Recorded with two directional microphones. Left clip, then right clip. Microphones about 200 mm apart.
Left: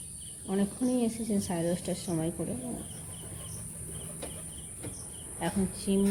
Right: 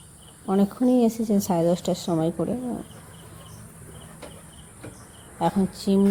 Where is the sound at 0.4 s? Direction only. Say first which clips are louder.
Right 9 dB; 40° right (ahead or behind).